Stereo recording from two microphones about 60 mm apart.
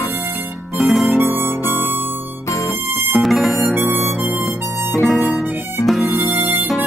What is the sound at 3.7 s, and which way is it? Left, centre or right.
Harmonica, right.